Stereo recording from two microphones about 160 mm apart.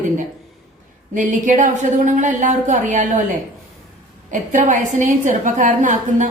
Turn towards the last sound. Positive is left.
turn(degrees=-50)  # may be behind; listen again after turning